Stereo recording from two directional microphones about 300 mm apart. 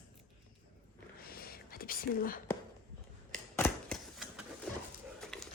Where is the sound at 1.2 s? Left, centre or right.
Left.